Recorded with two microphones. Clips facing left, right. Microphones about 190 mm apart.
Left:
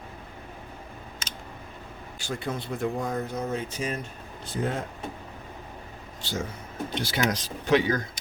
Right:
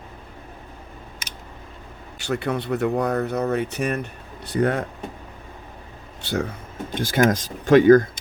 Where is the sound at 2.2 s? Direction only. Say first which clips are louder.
Right 7 dB; 65° right (ahead or behind).